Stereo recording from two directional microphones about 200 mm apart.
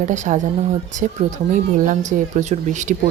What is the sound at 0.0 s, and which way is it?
Speech, 40° right (ahead or behind).